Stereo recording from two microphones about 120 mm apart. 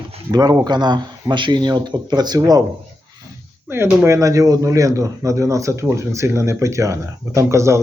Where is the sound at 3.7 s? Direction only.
20° right (ahead or behind).